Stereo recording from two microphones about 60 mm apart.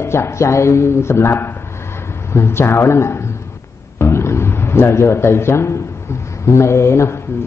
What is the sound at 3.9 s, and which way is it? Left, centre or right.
Music, left.